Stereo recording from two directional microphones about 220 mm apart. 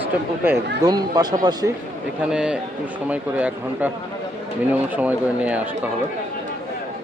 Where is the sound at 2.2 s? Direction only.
5° right (ahead or behind).